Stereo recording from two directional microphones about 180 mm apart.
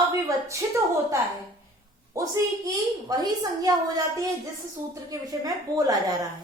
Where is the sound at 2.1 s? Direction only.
20° right (ahead or behind).